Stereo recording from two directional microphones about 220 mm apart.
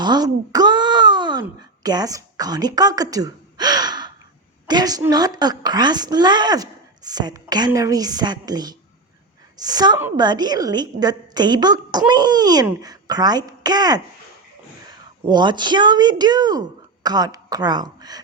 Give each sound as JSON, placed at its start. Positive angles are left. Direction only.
{"t": 0.0, "sound": "a woman's voice", "side_deg": -20}
{"t": 15.3, "sound": "speech", "side_deg": -20}